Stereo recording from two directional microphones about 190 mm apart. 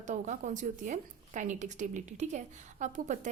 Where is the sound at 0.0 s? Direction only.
40° right (ahead or behind).